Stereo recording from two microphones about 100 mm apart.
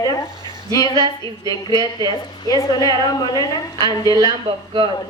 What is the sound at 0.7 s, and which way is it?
Speech, 40° left (ahead or behind).